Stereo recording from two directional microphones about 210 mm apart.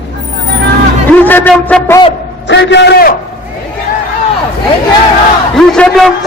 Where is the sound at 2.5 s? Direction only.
55° left (ahead or behind).